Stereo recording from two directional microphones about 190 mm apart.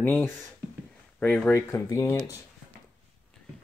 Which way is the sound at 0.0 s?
10° left (ahead or behind).